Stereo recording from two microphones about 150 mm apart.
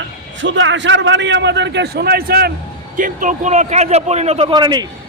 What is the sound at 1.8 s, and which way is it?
Speech, 90° right.